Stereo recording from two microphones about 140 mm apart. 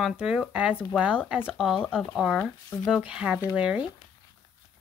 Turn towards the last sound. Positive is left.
turn(degrees=-10)  # may be behind; listen again after turning